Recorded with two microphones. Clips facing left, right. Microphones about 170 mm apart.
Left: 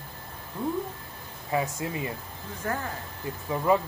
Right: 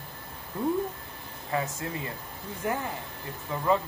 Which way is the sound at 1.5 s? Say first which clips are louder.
Left 2 dB; 20° left (ahead or behind).